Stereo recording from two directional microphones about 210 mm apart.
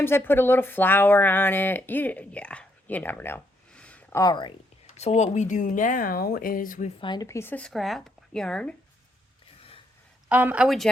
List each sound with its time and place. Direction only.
0.0 s speech: 10° left (ahead or behind)
4.2 s speech: 20° left (ahead or behind)
4.9 s speech: 30° left (ahead or behind)
7.0 s speech: 20° left (ahead or behind); by 8.7 s 5° left (ahead or behind)
9.6 s a sound: 25° left (ahead or behind)
10.2 s speech: 5° right (ahead or behind)